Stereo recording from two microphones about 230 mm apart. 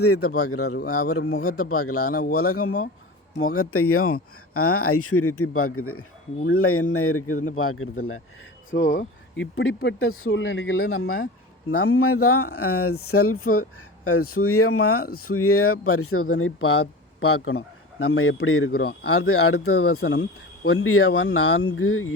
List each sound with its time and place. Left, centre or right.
0.0 s a man's voice: left
8.7 s speech: left
10.9 s a man's voice: left
20.0 s speech: left
20.7 s a man's voice: left